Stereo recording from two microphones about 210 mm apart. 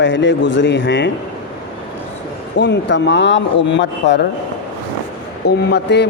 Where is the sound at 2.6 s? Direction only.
55° left (ahead or behind).